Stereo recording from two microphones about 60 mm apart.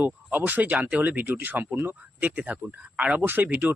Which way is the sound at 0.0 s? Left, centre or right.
Right.